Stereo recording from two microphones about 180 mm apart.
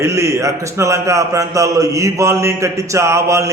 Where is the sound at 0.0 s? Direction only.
15° right (ahead or behind).